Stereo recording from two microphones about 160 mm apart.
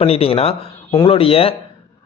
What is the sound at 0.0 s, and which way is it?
A man's voice, 35° left (ahead or behind).